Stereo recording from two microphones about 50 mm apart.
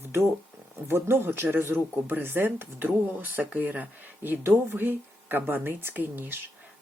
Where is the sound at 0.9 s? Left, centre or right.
Right.